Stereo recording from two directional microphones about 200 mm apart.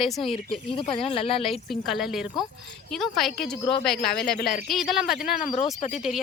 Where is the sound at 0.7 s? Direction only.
25° left (ahead or behind).